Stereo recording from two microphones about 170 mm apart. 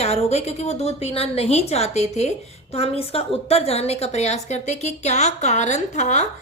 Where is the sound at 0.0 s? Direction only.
40° left (ahead or behind).